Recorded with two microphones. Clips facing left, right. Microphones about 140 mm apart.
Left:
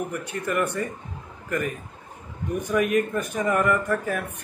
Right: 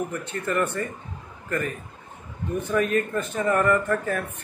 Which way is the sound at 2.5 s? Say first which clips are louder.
Left 1 dB; 15° left (ahead or behind).